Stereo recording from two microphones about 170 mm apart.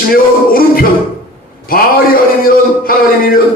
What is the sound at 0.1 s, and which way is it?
Speech, 60° left (ahead or behind).